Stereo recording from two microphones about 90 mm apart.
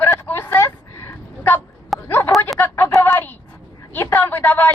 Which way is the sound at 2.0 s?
25° left (ahead or behind).